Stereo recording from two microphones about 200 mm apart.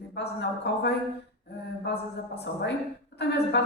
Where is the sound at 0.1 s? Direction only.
55° left (ahead or behind).